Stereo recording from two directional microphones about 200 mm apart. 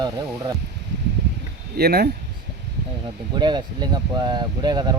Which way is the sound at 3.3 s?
20° right (ahead or behind).